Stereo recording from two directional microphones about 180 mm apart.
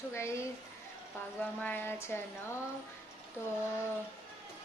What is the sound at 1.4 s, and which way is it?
Speech, 10° left (ahead or behind).